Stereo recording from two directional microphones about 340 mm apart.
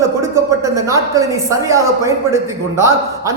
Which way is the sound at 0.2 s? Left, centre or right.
Centre.